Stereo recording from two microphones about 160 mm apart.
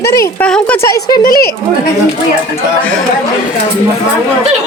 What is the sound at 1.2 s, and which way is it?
Speech, 65° left (ahead or behind).